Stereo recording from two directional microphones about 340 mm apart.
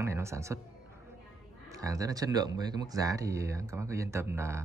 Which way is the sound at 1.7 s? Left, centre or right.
Centre.